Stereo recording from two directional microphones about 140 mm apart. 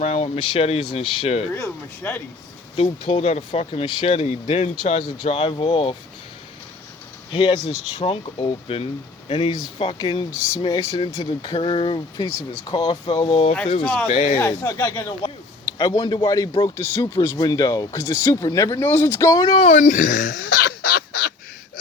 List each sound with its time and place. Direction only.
0.0 s speech: 50° left (ahead or behind)
0.3 s speech: 40° left (ahead or behind)
1.5 s speech: 20° left (ahead or behind)
2.7 s speech: 40° left (ahead or behind)
7.3 s speech: 35° left (ahead or behind)
11.5 s speech: 40° left (ahead or behind)
12.7 s speech: 45° left (ahead or behind)
13.8 s speech: 5° left (ahead or behind)
14.1 s speech: 45° left (ahead or behind)
14.3 s speech: 20° left (ahead or behind)
19.6 s speech: 60° left (ahead or behind)